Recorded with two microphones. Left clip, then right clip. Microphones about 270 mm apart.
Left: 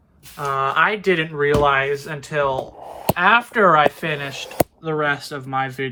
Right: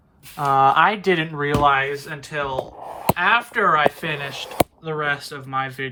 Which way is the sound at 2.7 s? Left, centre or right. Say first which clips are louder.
Right 1 dB; left.